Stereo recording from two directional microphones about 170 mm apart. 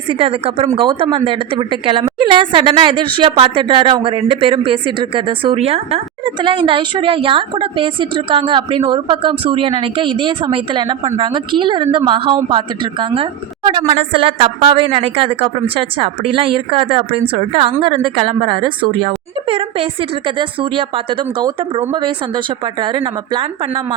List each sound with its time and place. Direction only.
0.1 s a woman's voice: 30° right (ahead or behind)